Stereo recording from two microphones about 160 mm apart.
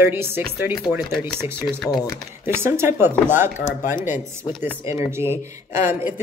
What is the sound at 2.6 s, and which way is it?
Speech, 15° right (ahead or behind).